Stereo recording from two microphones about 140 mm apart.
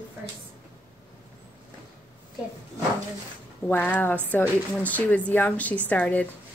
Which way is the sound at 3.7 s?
10° left (ahead or behind).